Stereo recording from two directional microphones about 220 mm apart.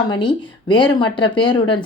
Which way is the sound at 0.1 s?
20° left (ahead or behind).